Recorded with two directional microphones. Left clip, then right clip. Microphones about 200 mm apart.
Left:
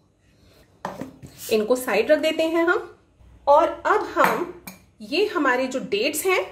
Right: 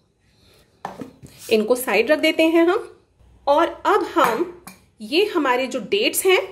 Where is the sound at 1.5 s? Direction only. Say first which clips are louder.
Right 3 dB; 30° right (ahead or behind).